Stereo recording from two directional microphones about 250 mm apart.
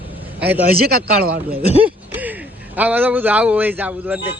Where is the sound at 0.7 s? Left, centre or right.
Right.